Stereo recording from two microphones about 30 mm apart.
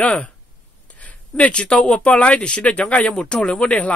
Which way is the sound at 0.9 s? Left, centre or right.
Left.